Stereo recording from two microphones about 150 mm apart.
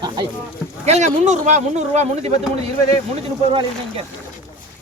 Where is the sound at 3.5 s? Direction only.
35° right (ahead or behind).